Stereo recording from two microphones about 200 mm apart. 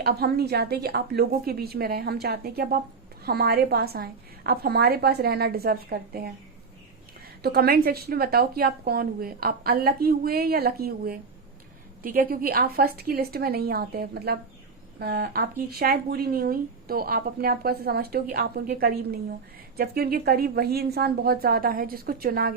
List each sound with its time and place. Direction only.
0.0 s speech: 50° right (ahead or behind)
7.4 s speech: 50° right (ahead or behind)